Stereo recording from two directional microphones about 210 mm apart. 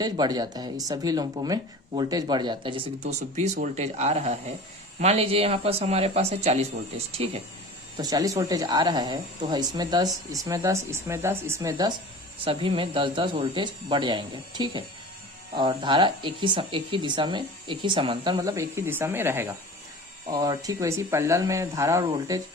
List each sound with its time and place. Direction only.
0.0 s speech: 20° right (ahead or behind)
7.9 s speech: 15° right (ahead or behind)
12.5 s speech: 25° right (ahead or behind)